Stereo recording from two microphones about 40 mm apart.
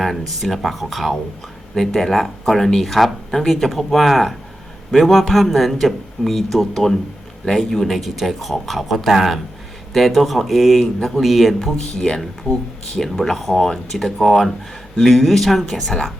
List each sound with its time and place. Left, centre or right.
0.0 s speech: centre
2.8 s speech: centre
11.8 s speech: centre